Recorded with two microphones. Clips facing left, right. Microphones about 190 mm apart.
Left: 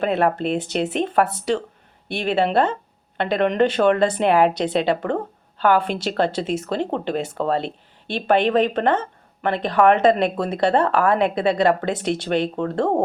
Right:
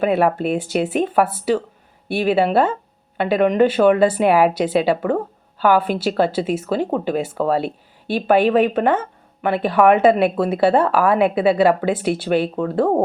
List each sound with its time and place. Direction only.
0.0 s a woman's voice: 10° right (ahead or behind)